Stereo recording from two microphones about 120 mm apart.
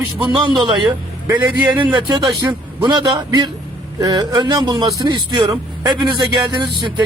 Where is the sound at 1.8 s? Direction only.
35° right (ahead or behind).